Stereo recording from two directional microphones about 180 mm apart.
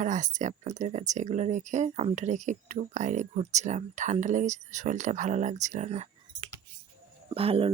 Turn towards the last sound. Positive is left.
turn(degrees=-30)  # may be behind; listen again after turning